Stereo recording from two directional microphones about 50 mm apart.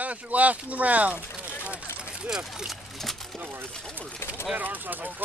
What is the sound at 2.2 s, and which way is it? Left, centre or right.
Speech, centre.